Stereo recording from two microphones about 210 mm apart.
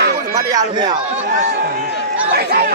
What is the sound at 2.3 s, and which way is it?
Speech, 50° right (ahead or behind).